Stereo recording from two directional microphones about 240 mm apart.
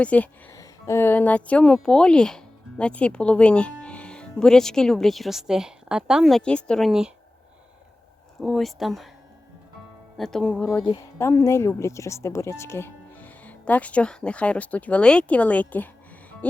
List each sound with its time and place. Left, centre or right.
0.0 s a woman's voice: centre
8.4 s a woman's voice: centre
10.2 s a woman's voice: centre
16.4 s music: centre